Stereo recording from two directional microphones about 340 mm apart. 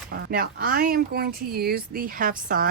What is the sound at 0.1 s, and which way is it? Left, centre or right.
Speech, right.